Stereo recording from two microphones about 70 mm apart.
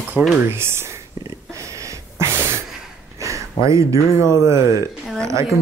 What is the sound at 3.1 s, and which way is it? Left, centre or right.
Speech, right.